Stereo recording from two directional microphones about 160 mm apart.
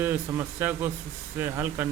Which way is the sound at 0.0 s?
10° right (ahead or behind).